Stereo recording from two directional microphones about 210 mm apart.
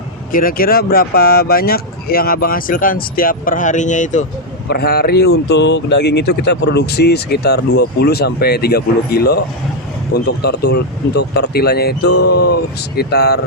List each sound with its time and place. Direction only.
0.3 s speech: 40° left (ahead or behind)
4.7 s speech: 50° left (ahead or behind)